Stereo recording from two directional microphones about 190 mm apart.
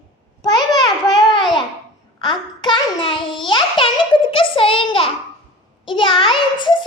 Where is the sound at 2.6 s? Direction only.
25° left (ahead or behind).